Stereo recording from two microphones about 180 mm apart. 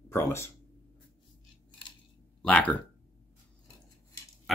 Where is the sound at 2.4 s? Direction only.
10° left (ahead or behind).